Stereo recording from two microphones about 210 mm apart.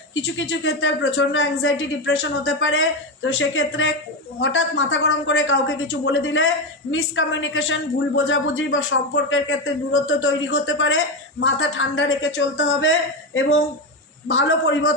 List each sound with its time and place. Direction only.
0.1 s a woman's voice: 65° left (ahead or behind)